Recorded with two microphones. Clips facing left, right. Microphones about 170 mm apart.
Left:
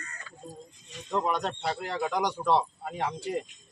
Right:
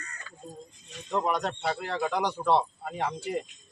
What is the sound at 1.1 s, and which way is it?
Speech, 10° right (ahead or behind).